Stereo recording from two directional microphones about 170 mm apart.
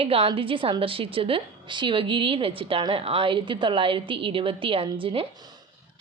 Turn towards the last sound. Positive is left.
turn(degrees=-25)  # may be behind; listen again after turning